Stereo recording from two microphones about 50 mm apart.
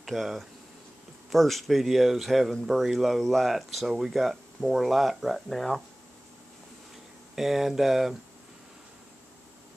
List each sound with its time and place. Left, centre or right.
0.0 s speech: centre
7.3 s speech: centre